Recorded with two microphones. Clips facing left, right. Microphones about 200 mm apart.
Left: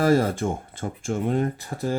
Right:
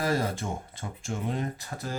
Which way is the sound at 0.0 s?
50° left (ahead or behind).